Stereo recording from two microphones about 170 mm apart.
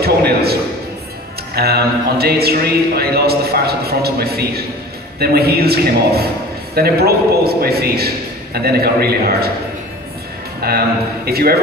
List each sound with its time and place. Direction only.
0.0 s a sound: 70° right (ahead or behind)
1.5 s speech: 70° right (ahead or behind)
10.6 s speech: 70° right (ahead or behind)